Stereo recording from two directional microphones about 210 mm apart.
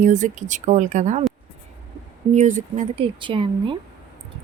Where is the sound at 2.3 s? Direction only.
35° right (ahead or behind).